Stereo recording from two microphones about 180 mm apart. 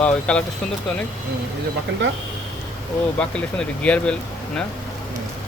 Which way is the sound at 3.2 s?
5° left (ahead or behind).